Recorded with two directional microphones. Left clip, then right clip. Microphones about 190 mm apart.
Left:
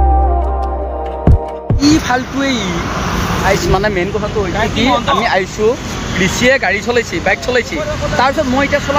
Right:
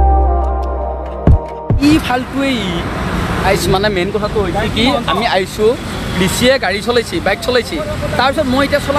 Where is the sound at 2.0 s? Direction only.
Centre (ahead or behind).